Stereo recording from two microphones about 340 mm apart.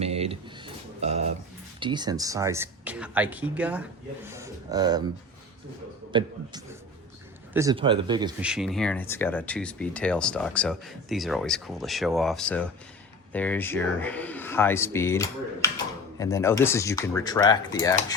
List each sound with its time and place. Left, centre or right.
0.0 s a sound: centre
1.8 s speech: centre
6.1 s speech: centre
7.5 s speech: centre